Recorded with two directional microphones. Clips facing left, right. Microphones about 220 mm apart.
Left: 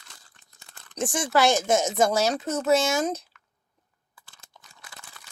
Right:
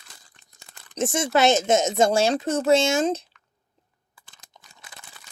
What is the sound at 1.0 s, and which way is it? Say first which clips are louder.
Speech: right 2 dB; 25° right (ahead or behind).